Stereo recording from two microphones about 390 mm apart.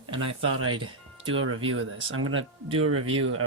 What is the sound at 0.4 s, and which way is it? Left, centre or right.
Speech, right.